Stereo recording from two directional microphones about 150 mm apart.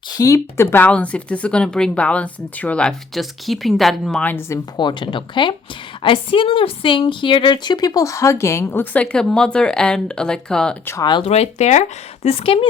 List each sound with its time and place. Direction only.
0.2 s speech: 20° left (ahead or behind)
4.8 s a woman's voice: 30° left (ahead or behind); by 10.8 s 5° left (ahead or behind)
11.2 s speech: 45° left (ahead or behind)